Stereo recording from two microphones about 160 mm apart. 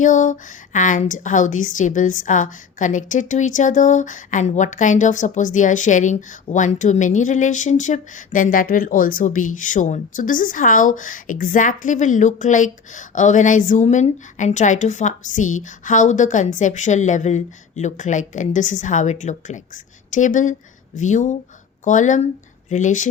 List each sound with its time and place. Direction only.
0.0 s a woman's voice: 50° left (ahead or behind)